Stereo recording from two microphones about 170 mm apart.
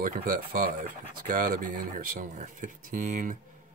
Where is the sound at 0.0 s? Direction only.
55° right (ahead or behind).